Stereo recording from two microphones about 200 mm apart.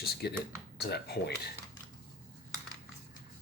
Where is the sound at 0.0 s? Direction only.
55° left (ahead or behind).